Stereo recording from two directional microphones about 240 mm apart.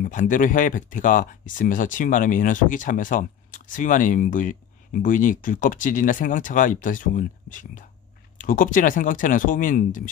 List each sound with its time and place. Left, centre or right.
0.0 s speech: left